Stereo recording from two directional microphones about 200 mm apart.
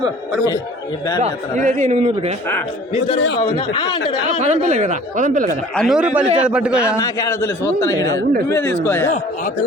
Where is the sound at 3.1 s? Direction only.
60° left (ahead or behind).